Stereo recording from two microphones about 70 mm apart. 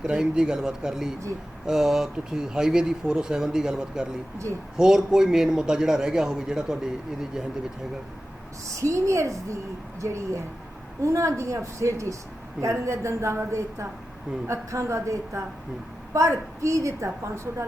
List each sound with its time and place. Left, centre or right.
0.0 s a man's voice: centre
8.8 s a woman's voice: right